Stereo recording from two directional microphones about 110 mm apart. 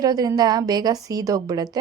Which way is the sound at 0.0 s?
35° right (ahead or behind).